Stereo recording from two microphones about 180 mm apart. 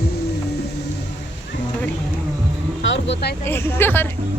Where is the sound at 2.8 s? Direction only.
85° left.